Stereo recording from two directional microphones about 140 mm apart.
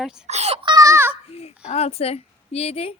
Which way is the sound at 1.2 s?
45° left (ahead or behind).